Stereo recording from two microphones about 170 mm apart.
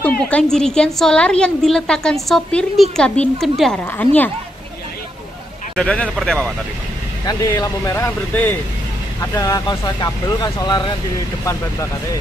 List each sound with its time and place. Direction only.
0.2 s a woman's voice: 5° left (ahead or behind)
5.8 s a woman's voice: 5° left (ahead or behind)
7.2 s speech: 20° left (ahead or behind)